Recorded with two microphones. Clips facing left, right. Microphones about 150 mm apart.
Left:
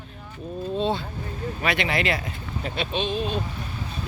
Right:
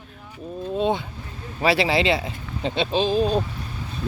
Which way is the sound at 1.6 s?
30° right (ahead or behind).